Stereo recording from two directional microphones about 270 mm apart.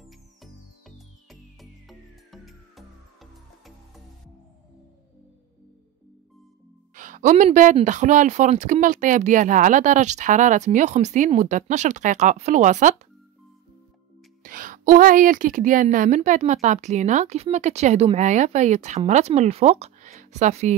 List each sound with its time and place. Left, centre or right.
0.0 s music: centre
7.0 s a woman's voice: right
14.4 s a woman's voice: right